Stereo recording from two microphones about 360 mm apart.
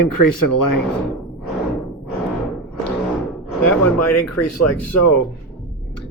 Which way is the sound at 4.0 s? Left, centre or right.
Left.